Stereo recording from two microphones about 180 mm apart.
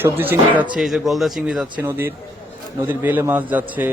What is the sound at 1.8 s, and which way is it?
A man's voice, 15° right (ahead or behind).